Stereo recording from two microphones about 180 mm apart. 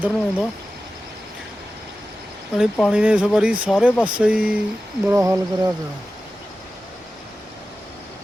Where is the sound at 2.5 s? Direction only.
5° left (ahead or behind).